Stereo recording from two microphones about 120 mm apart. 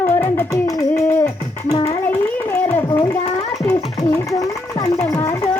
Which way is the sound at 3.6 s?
30° left (ahead or behind).